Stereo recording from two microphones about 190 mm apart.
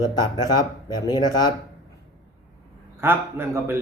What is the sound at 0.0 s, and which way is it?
Speech, 20° left (ahead or behind).